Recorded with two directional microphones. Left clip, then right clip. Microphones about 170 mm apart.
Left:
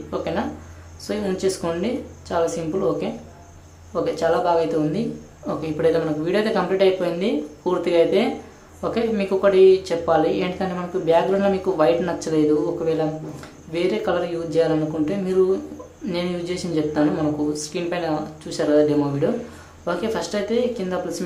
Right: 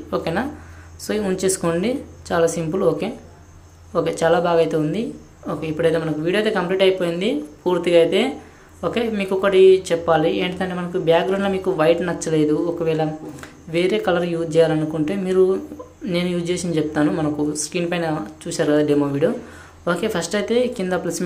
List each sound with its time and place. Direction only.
0.1 s speech: 20° right (ahead or behind)